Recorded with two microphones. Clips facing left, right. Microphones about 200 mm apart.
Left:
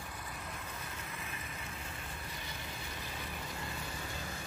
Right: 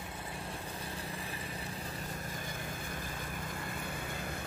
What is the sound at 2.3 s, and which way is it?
Vehicle, 50° right (ahead or behind).